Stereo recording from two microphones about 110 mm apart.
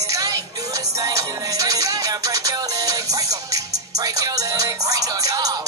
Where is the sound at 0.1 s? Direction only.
30° right (ahead or behind).